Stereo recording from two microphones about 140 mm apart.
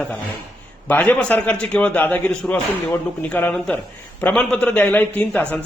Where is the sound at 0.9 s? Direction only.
10° left (ahead or behind).